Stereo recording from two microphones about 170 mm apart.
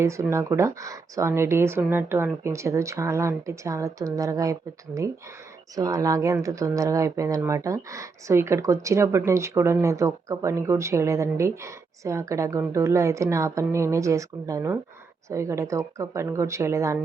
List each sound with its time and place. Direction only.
0.0 s speech: 15° right (ahead or behind)